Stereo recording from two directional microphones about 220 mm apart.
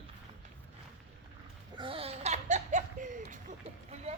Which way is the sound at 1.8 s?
25° right (ahead or behind).